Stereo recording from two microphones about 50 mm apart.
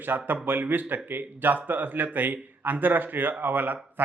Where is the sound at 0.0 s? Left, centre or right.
Right.